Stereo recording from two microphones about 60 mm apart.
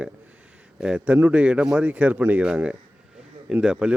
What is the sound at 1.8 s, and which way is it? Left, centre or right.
Speech, right.